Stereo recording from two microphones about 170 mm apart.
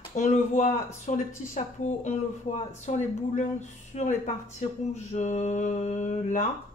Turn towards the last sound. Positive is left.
turn(degrees=45)  # may be behind; listen again after turning